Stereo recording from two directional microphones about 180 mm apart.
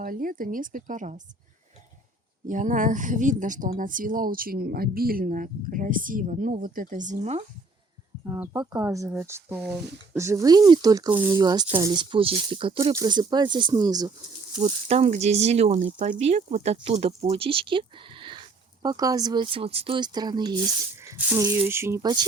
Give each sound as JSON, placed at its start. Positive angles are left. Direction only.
{"t": 0.0, "sound": "a woman's voice", "side_deg": -50}
{"t": 2.5, "sound": "a woman's voice", "side_deg": -45}
{"t": 8.2, "sound": "speech", "side_deg": -15}
{"t": 11.1, "sound": "speech", "side_deg": -10}
{"t": 11.3, "sound": "speech", "side_deg": -20}
{"t": 14.6, "sound": "speech", "side_deg": -35}